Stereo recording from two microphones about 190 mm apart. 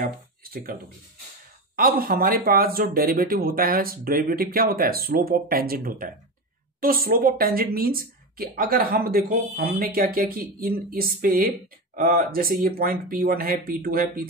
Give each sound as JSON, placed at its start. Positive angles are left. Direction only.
{"t": 0.0, "sound": "speech", "side_deg": -50}
{"t": 1.8, "sound": "speech", "side_deg": -50}